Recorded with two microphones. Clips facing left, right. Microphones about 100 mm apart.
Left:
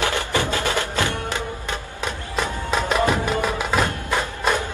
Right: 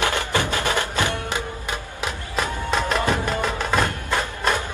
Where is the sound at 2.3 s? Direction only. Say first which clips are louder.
Even; centre (ahead or behind).